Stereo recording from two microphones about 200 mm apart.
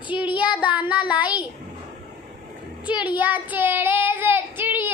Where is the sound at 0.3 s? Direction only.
25° left (ahead or behind).